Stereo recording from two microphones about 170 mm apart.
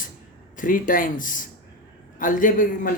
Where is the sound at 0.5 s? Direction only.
50° left (ahead or behind).